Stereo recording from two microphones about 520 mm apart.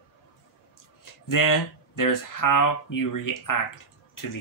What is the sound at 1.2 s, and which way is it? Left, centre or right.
Speech, left.